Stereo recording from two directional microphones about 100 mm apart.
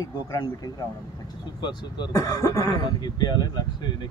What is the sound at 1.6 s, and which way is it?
Speech, 50° left (ahead or behind).